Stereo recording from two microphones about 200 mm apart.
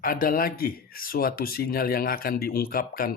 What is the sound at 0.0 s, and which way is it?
Speech, 45° left (ahead or behind).